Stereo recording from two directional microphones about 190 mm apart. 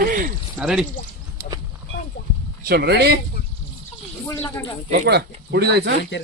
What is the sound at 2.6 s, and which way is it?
Speech, 60° right (ahead or behind).